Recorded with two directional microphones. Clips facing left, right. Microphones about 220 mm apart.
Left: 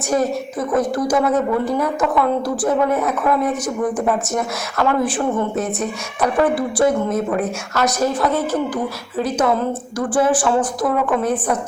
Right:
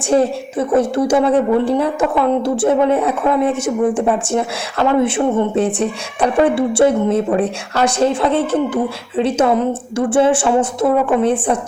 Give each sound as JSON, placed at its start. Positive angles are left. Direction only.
{"t": 0.1, "sound": "a woman's voice", "side_deg": -30}